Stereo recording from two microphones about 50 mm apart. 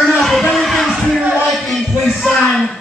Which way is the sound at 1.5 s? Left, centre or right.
Centre.